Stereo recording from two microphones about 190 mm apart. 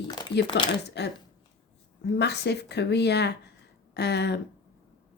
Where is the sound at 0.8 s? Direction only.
60° left (ahead or behind).